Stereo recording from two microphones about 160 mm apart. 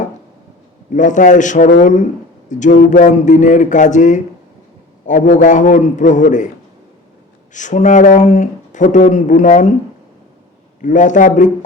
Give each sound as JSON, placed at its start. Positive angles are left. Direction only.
{"t": 0.9, "sound": "speech", "side_deg": 50}
{"t": 7.5, "sound": "speech", "side_deg": 50}
{"t": 10.8, "sound": "speech", "side_deg": 50}